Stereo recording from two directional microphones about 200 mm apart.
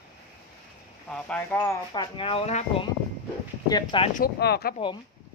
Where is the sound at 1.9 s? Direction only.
25° left (ahead or behind).